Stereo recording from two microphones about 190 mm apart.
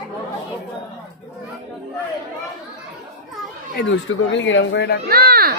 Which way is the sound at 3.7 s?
70° left (ahead or behind).